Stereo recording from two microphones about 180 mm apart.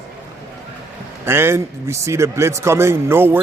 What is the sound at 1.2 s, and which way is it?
A man's voice, 15° right (ahead or behind).